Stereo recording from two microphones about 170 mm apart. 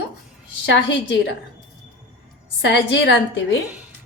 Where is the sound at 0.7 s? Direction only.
90° left.